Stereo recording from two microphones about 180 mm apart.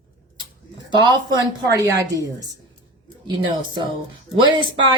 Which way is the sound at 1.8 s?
20° right (ahead or behind).